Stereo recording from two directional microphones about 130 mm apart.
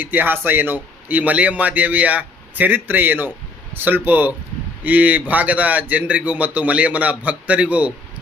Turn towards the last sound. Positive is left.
turn(degrees=-10)  # may be behind; listen again after turning